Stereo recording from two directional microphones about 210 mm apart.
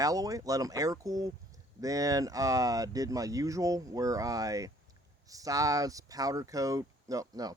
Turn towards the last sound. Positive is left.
turn(degrees=-15)  # may be behind; listen again after turning